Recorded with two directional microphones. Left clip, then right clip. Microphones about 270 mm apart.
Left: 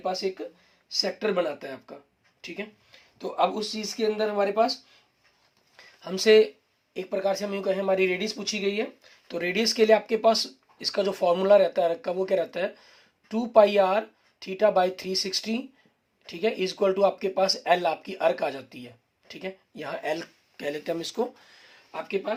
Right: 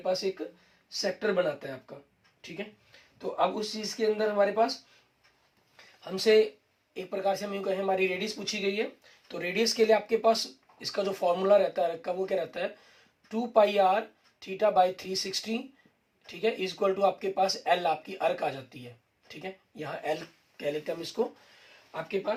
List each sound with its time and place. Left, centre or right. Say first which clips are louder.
0.0 s speech: left 1 dB; left
1.9 s speech: left 2 dB; left
3.2 s speech: left 3 dB; left
5.7 s a sound: left 3 dB; left
6.9 s speech: left 3 dB; left